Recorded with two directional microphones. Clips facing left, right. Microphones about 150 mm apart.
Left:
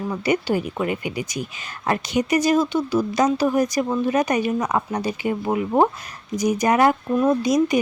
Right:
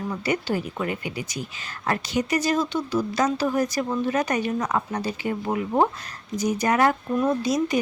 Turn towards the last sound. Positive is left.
turn(degrees=15)  # may be behind; listen again after turning